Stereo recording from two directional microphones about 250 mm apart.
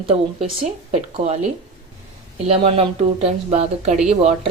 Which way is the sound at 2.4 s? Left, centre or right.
Right.